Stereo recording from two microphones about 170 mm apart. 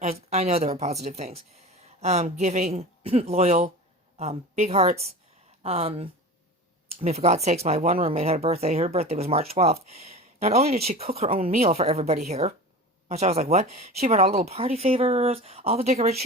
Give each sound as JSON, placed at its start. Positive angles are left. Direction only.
{"t": 0.0, "sound": "speech", "side_deg": -40}